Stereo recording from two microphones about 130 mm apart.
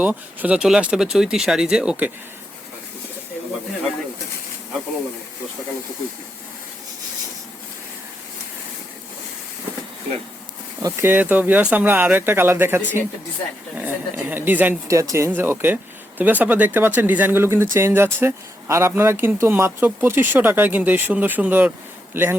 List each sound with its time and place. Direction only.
0.0 s speech: 10° right (ahead or behind)
10.8 s speech: 15° right (ahead or behind)